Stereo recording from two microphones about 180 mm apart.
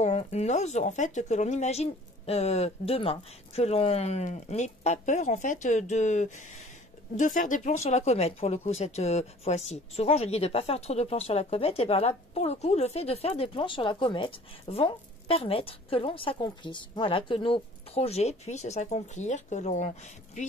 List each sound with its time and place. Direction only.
0.0 s speech: 35° left (ahead or behind)